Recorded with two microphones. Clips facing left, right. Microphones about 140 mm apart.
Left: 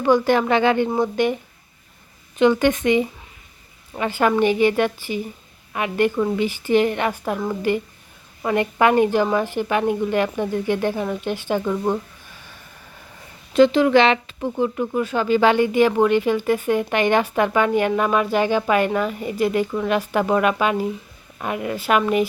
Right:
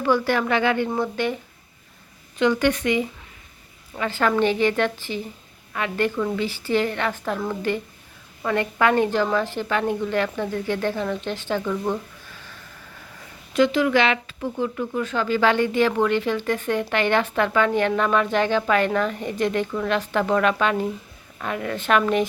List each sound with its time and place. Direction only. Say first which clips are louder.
0.0 s a woman's voice: left 4 dB; 20° left (ahead or behind)
2.4 s a woman's voice: left 3 dB; 20° left (ahead or behind)
13.5 s speech: left 5 dB; 30° left (ahead or behind); by 22.3 s 10° left (ahead or behind)